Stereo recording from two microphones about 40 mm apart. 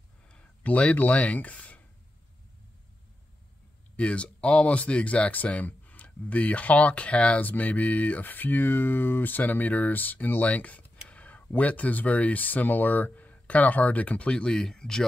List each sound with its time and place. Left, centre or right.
0.3 s a sound: left
0.9 s speech: left
3.9 s speech: left
5.3 s speech: left
7.3 s speech: left
10.4 s speech: left
14.3 s speech: centre